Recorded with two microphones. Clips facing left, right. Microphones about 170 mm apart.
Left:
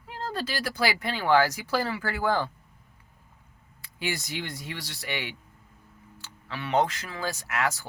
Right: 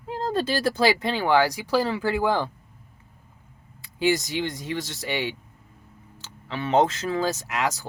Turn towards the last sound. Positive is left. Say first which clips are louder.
# right 2 dB
turn(degrees=-20)  # may be behind; listen again after turning